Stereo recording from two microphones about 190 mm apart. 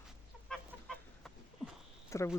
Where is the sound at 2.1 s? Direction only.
15° left (ahead or behind).